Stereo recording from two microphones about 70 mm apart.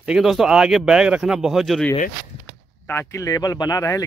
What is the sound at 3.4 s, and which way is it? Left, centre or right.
Speech, left.